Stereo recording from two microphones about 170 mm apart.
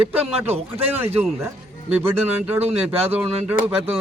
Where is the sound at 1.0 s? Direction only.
15° right (ahead or behind).